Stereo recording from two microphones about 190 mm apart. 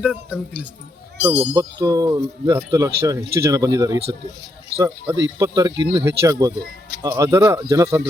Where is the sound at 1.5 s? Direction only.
15° right (ahead or behind).